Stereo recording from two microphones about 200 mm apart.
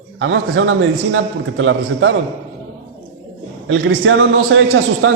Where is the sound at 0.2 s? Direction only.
70° right (ahead or behind).